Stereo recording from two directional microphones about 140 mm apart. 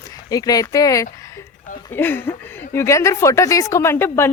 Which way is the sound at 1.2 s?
20° left (ahead or behind).